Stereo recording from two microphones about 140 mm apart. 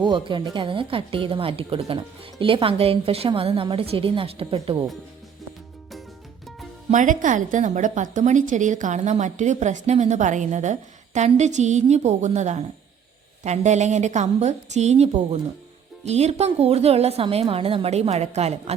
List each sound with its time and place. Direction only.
0.0 s speech: 35° right (ahead or behind)
6.9 s a woman's voice: 65° right (ahead or behind); by 18.7 s 50° right (ahead or behind)